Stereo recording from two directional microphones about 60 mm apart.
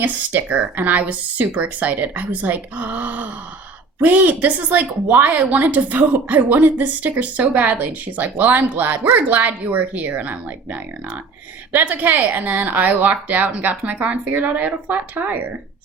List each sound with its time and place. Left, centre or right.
0.0 s a woman's voice: right